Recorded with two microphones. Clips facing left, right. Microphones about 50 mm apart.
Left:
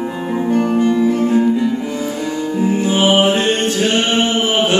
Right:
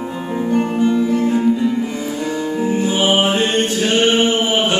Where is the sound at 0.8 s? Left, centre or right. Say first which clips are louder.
Left 1 dB; centre.